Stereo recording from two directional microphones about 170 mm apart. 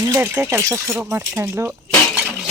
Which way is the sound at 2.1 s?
10° right (ahead or behind).